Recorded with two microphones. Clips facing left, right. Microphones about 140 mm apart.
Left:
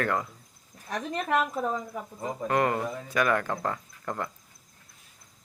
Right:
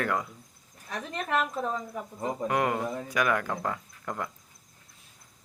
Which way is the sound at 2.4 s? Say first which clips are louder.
Left 2 dB; 10° right (ahead or behind).